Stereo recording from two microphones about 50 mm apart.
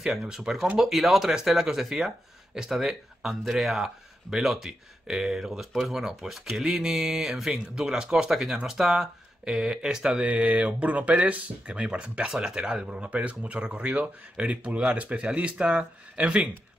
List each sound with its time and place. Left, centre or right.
0.0 s speech: centre
10.2 s speech: right